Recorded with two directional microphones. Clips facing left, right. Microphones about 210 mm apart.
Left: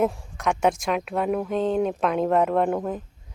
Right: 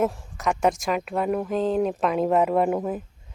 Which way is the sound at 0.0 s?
Centre (ahead or behind).